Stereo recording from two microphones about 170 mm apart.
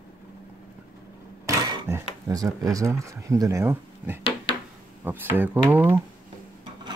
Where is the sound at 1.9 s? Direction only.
15° right (ahead or behind).